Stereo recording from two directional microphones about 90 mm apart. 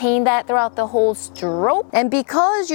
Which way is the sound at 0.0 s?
15° left (ahead or behind).